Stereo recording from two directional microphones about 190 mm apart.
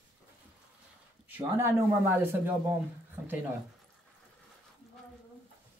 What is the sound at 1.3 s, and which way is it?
Speech, 10° right (ahead or behind).